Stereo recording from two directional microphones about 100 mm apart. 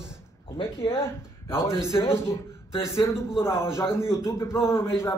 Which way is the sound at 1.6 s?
30° left (ahead or behind).